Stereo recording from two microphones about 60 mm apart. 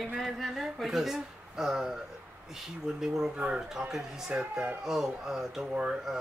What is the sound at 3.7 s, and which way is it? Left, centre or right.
Speech, centre.